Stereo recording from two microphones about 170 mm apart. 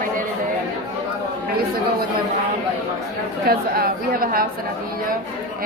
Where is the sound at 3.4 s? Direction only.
60° right (ahead or behind).